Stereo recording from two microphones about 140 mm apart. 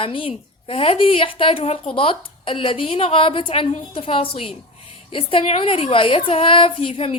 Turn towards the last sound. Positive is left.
turn(degrees=45)  # may be behind; listen again after turning